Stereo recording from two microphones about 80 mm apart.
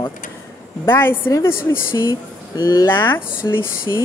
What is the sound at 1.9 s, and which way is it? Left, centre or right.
Speech, left.